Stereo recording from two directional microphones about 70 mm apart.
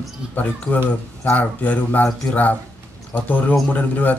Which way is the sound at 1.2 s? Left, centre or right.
Left.